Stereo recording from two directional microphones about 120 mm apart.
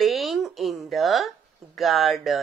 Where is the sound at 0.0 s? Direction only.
Centre (ahead or behind).